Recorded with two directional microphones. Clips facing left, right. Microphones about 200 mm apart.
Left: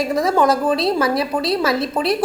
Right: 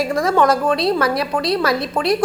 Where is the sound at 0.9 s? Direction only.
25° left (ahead or behind).